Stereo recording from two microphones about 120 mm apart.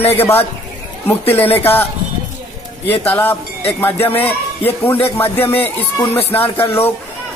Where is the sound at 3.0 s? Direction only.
15° left (ahead or behind).